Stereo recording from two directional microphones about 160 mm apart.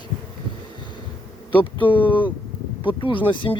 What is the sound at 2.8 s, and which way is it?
Speech, 30° left (ahead or behind).